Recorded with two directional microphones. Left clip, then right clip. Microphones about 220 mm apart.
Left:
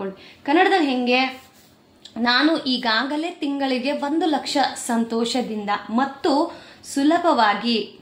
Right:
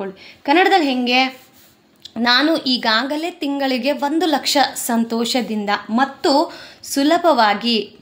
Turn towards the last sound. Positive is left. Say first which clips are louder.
# right 3 dB
turn(degrees=-50)  # may be behind; listen again after turning